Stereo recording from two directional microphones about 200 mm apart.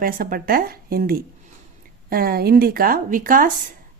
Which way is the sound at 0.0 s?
45° right (ahead or behind).